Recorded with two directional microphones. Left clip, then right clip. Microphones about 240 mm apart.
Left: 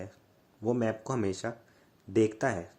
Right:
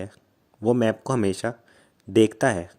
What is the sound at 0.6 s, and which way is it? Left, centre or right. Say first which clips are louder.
Speech: right 9 dB; right.